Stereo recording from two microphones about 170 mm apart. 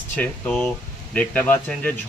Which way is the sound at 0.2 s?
5° left (ahead or behind).